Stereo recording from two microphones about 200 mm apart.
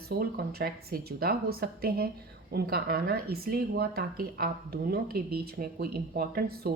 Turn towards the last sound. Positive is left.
turn(degrees=-50)  # may be behind; listen again after turning